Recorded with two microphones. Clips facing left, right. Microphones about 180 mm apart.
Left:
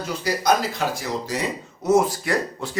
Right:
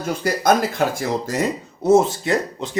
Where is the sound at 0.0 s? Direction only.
50° right (ahead or behind).